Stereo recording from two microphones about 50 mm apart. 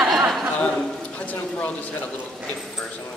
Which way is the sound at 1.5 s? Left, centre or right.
Left.